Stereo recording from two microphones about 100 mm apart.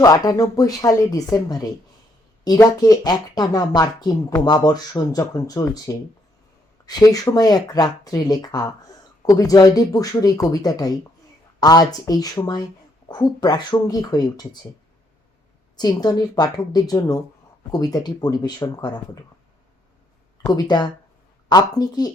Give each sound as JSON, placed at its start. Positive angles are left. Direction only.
{"t": 0.0, "sound": "speech", "side_deg": 40}
{"t": 15.7, "sound": "speech", "side_deg": 45}
{"t": 20.5, "sound": "speech", "side_deg": 45}